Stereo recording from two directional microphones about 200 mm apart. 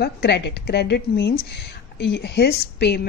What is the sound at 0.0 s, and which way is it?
A woman's voice, 55° left (ahead or behind).